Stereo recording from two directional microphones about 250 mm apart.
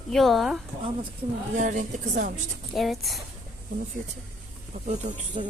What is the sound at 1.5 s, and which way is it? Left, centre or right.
Speech, right.